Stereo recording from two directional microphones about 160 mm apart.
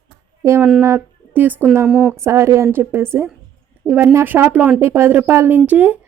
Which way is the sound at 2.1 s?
15° right (ahead or behind).